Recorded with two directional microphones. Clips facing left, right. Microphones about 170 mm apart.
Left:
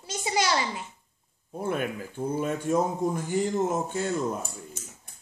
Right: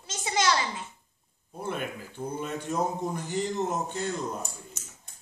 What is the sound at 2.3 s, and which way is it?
Speech, 50° left (ahead or behind).